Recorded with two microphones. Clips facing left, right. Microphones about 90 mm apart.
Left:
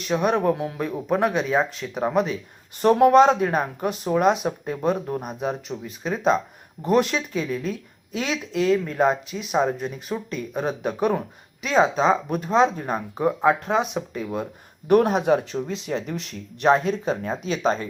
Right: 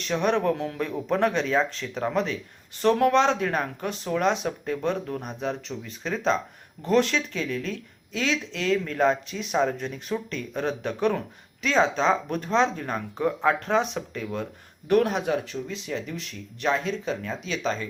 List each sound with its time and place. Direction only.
0.0 s speech: 10° left (ahead or behind)
17.2 s speech: 35° left (ahead or behind)